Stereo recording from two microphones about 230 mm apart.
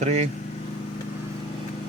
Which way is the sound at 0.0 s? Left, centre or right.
Right.